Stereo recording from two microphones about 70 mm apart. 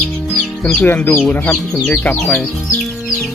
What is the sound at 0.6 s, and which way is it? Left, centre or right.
Speech, centre.